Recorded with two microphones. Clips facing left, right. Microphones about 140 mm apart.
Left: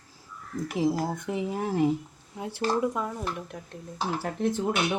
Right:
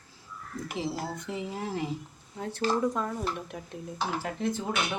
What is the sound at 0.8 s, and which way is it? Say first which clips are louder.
Speech: left 10 dB; 45° left (ahead or behind).